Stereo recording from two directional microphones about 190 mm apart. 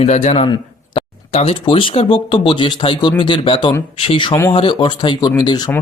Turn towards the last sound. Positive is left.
turn(degrees=20)  # may be behind; listen again after turning